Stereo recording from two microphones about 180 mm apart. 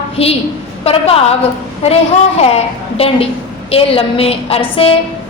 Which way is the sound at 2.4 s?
35° left (ahead or behind).